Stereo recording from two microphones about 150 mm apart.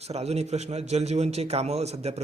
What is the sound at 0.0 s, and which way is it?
A man's voice, 45° right (ahead or behind).